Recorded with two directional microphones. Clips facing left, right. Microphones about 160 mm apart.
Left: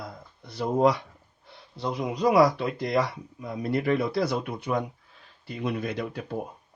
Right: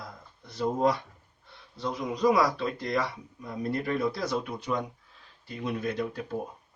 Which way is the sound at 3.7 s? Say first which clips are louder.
Left 5 dB; 70° left (ahead or behind).